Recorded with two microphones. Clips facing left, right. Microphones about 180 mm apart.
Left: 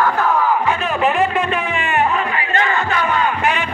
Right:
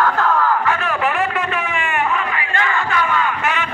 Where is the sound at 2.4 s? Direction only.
30° left (ahead or behind).